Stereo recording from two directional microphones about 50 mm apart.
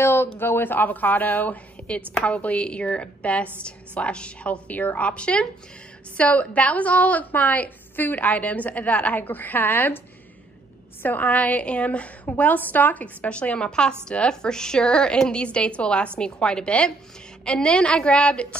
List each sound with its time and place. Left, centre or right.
0.0 s a woman's voice: left
11.0 s a woman's voice: left